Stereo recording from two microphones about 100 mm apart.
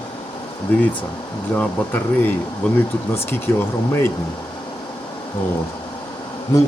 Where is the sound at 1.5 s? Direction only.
20° left (ahead or behind).